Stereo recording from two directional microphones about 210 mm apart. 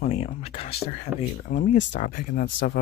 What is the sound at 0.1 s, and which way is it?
Speech, 30° left (ahead or behind).